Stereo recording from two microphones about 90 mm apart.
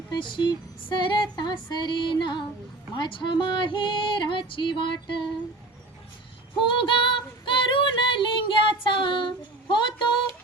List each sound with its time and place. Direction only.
0.1 s female singing: 60° left (ahead or behind)
6.7 s female singing: 70° left (ahead or behind)